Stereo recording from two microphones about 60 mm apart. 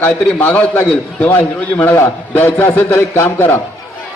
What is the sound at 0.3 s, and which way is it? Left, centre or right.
A man's voice, left.